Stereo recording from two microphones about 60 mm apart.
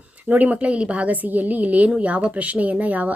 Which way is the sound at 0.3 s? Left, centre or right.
Right.